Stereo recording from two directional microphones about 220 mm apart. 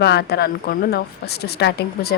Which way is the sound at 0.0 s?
50° left (ahead or behind).